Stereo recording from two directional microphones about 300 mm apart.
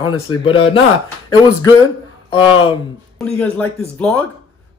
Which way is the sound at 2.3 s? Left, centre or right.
Centre.